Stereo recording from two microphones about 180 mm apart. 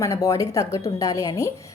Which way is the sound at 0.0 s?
20° left (ahead or behind).